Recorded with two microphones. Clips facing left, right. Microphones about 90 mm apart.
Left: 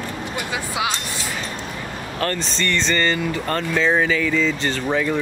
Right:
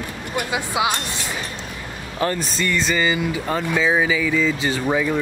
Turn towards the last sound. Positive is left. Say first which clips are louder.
# right 1 dB
turn(degrees=-10)  # may be behind; listen again after turning